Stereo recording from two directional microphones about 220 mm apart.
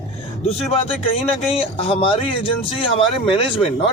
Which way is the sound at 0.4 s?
25° left (ahead or behind).